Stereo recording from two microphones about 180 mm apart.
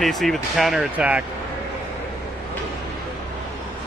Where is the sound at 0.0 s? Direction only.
Centre (ahead or behind).